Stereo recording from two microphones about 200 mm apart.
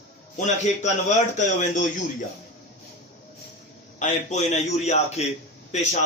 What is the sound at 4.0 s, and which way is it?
A man's voice, 35° left (ahead or behind).